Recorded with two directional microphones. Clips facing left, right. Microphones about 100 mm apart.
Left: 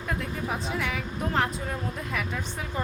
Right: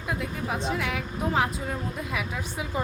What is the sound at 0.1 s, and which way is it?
A woman's voice, centre (ahead or behind).